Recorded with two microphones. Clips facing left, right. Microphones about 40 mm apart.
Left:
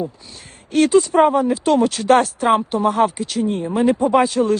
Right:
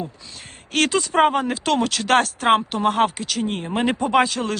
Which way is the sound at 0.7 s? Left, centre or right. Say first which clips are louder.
Left 6 dB; right.